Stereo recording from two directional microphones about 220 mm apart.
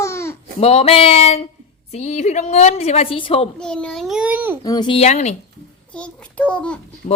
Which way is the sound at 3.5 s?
5° left (ahead or behind).